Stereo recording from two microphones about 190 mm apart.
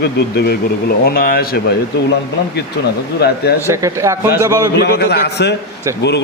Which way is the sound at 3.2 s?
60° left (ahead or behind).